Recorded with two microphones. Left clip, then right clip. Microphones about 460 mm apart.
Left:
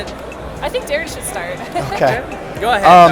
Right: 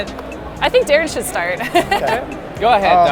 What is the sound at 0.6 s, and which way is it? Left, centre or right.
Speech, right.